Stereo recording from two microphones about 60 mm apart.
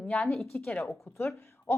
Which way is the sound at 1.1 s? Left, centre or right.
Left.